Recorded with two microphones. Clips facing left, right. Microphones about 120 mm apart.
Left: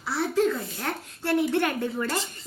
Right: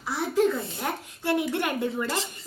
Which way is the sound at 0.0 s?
15° right (ahead or behind).